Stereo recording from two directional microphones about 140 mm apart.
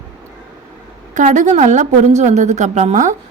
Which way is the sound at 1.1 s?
60° right (ahead or behind).